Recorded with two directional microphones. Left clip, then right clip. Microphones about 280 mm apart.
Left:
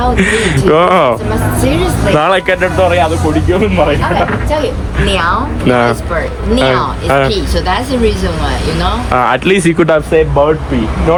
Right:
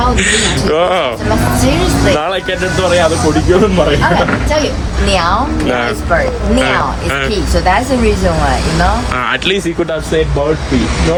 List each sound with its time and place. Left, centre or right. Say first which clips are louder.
0.2 s a man's voice: left 1 dB; left
2.1 s a man's voice: left 5 dB; left
9.1 s speech: left 4 dB; centre